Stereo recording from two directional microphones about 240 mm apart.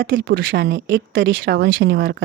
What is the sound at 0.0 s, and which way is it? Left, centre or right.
Speech, right.